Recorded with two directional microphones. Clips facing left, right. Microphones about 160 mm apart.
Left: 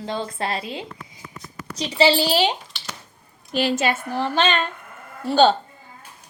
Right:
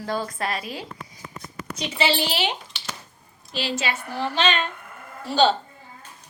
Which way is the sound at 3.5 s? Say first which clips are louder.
Left 6 dB; 50° left (ahead or behind).